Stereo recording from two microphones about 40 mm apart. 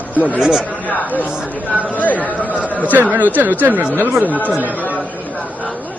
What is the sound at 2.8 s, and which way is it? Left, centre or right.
Speech, right.